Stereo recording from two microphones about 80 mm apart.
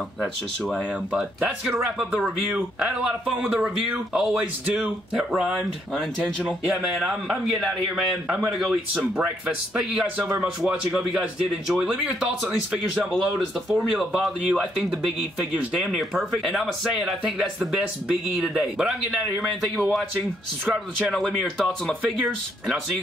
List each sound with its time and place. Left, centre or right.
2.8 s speech: centre
4.4 s speech: centre
5.1 s speech: centre
10.4 s speech: centre
21.1 s speech: centre